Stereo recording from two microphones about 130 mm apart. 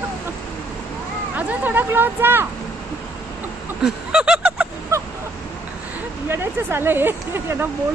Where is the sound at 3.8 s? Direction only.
5° right (ahead or behind).